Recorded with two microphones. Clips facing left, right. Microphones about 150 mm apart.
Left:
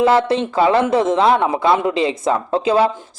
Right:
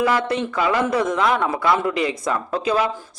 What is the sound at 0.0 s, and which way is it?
Speech, 25° left (ahead or behind).